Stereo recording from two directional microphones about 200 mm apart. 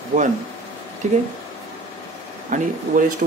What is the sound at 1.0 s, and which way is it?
Speech, 35° right (ahead or behind).